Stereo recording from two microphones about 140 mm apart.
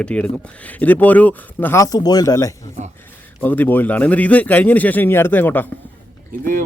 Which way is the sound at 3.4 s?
15° left (ahead or behind).